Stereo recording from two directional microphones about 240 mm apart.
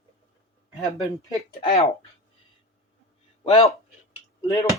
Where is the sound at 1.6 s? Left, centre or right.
Centre.